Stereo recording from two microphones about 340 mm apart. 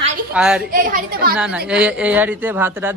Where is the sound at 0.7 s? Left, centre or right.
Right.